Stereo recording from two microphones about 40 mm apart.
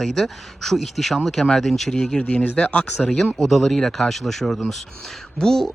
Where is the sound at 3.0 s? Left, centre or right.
Centre.